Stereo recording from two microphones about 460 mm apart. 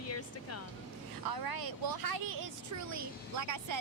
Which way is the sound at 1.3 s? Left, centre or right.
Right.